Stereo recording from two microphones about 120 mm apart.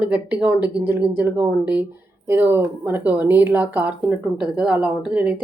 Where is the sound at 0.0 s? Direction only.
10° right (ahead or behind).